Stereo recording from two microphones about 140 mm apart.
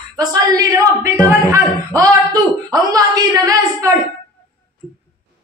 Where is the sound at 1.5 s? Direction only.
25° right (ahead or behind).